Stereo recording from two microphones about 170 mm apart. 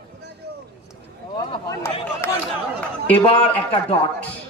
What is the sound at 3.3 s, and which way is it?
Speech, 35° left (ahead or behind).